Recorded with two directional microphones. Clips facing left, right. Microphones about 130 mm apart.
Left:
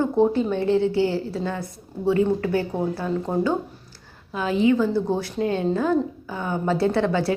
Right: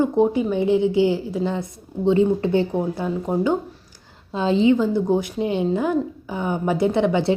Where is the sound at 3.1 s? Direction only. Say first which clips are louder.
Right 1 dB; 10° right (ahead or behind).